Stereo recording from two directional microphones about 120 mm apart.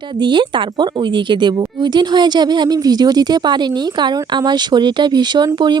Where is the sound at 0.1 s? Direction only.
40° right (ahead or behind).